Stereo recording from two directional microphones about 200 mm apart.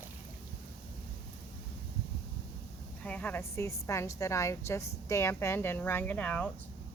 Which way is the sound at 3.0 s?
5° left (ahead or behind).